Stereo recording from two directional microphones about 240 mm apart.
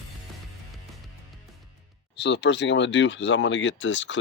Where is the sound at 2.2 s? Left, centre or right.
Left.